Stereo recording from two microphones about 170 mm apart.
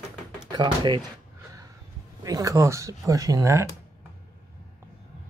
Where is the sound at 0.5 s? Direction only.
25° right (ahead or behind).